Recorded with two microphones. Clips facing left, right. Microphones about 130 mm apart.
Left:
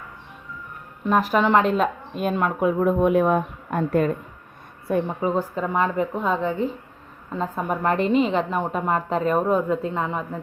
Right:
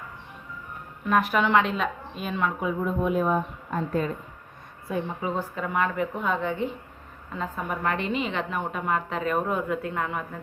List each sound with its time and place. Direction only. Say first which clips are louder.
1.0 s a woman's voice: left 3 dB; 35° left (ahead or behind); by 4.1 s 65° left (ahead or behind)
5.2 s a woman's voice: left 6 dB; 40° left (ahead or behind)